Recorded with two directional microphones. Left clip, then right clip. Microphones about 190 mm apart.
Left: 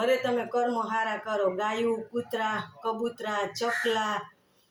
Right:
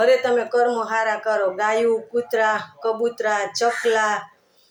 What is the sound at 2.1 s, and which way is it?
A man's voice, 20° left (ahead or behind).